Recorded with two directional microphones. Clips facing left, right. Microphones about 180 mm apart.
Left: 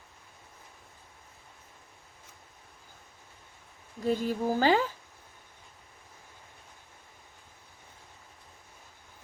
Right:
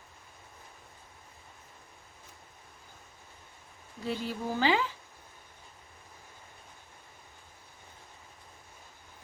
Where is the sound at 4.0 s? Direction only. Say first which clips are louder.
Left 6 dB; 45° left (ahead or behind).